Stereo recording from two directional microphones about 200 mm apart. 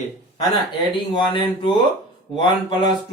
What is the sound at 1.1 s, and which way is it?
Speech, 25° left (ahead or behind).